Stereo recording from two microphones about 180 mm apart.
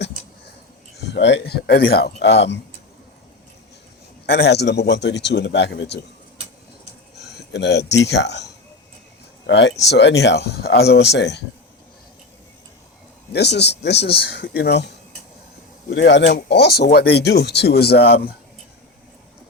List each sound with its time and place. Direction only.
0.9 s speech: 70° left (ahead or behind)
4.4 s speech: 65° left (ahead or behind)
7.3 s speech: 70° left (ahead or behind)
9.5 s speech: 75° left (ahead or behind)
13.3 s speech: 65° left (ahead or behind)
14.2 s speech: 60° left (ahead or behind)
15.9 s speech: 75° left (ahead or behind); by 18.2 s 60° left (ahead or behind)